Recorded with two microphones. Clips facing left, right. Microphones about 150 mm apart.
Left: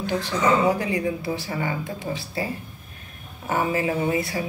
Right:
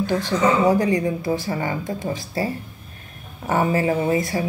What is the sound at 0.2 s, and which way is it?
Speech, 40° right (ahead or behind).